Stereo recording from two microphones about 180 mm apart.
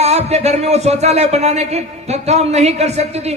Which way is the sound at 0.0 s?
35° right (ahead or behind).